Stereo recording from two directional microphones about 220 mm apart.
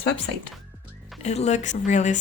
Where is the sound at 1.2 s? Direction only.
30° left (ahead or behind).